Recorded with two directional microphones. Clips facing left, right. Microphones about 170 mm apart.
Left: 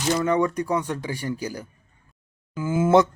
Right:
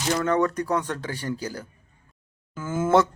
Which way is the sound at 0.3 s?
10° left (ahead or behind).